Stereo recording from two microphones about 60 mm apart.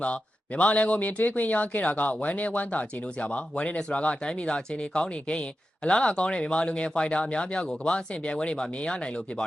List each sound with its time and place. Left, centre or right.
0.0 s a man's voice: left